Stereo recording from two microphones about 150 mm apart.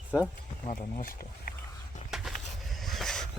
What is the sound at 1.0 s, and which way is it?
Speech, 75° left (ahead or behind).